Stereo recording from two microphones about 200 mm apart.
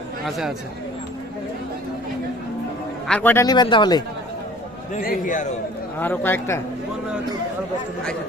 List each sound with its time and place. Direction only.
0.3 s speech: centre (ahead or behind)
3.1 s speech: 10° left (ahead or behind)
4.9 s a man's voice: 45° left (ahead or behind)
6.0 s a man's voice: 10° left (ahead or behind)